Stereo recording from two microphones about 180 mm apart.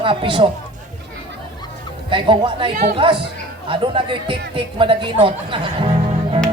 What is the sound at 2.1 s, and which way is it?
A man's voice, 25° right (ahead or behind).